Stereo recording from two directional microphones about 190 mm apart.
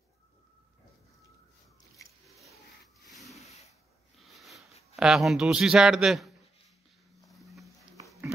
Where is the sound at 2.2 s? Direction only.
Centre (ahead or behind).